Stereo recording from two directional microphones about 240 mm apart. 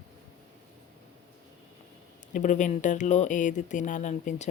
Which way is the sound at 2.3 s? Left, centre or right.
Left.